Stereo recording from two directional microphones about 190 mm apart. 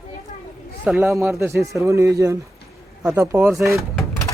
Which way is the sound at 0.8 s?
5° right (ahead or behind).